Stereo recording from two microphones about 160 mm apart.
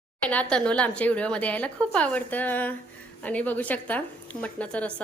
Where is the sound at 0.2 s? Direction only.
10° left (ahead or behind).